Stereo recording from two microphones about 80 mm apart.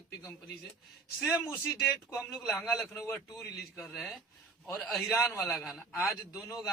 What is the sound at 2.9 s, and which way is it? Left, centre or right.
Speech, left.